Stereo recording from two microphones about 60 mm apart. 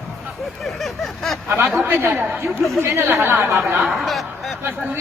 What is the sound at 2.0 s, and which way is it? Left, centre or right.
Speech, right.